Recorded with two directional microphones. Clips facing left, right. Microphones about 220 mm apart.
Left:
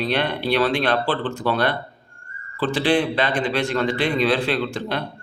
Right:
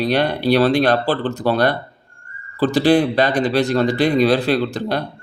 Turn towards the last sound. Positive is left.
turn(degrees=-40)  # may be behind; listen again after turning